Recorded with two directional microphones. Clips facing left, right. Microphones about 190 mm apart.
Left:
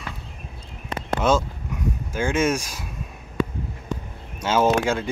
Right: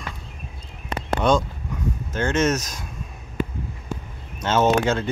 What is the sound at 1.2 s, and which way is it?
Speech, 5° left (ahead or behind).